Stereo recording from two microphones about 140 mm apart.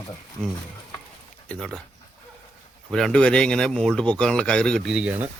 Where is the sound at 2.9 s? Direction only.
5° left (ahead or behind).